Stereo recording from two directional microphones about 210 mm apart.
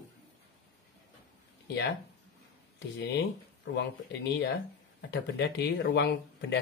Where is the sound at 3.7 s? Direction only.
55° left (ahead or behind).